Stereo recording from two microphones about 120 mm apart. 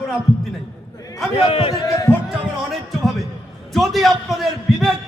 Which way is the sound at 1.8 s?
30° left (ahead or behind).